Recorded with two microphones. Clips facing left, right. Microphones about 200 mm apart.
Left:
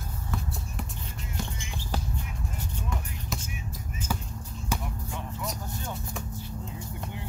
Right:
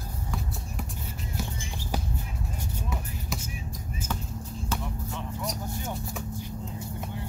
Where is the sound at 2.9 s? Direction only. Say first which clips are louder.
Left 1 dB; 5° right (ahead or behind).